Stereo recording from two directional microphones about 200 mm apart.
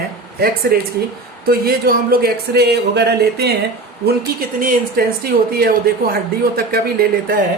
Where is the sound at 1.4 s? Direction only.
50° right (ahead or behind).